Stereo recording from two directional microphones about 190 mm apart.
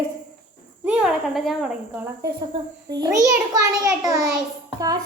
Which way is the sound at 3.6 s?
20° right (ahead or behind).